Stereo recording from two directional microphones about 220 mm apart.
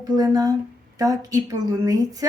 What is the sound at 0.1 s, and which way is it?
Speech, 15° right (ahead or behind).